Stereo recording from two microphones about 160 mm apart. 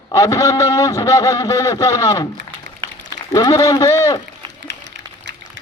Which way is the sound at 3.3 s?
20° left (ahead or behind).